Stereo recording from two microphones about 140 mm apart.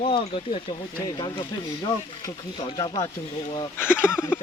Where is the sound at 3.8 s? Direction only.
15° left (ahead or behind).